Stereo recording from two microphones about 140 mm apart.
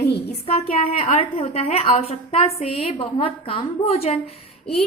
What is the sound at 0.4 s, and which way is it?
A woman's voice, 45° left (ahead or behind).